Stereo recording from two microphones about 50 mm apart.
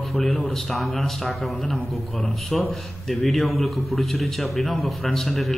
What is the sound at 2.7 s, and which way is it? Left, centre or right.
Speech, centre.